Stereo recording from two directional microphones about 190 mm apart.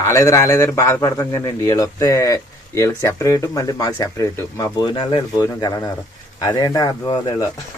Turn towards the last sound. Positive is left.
turn(degrees=20)  # may be behind; listen again after turning